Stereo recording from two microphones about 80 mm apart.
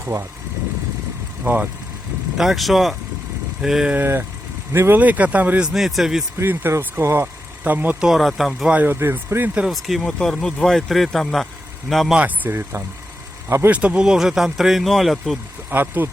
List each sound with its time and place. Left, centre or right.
0.0 s speech: right
1.5 s speech: right
2.4 s speech: centre
3.9 s speech: right
4.9 s speech: centre
5.6 s speech: centre
6.4 s speech: right
7.6 s speech: right
8.0 s speech: centre
8.6 s speech: right
9.6 s speech: centre
12.1 s speech: centre
13.7 s speech: centre
15.7 s speech: right